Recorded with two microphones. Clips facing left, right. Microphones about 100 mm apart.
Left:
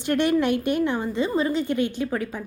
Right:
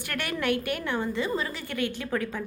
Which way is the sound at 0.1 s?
20° left (ahead or behind).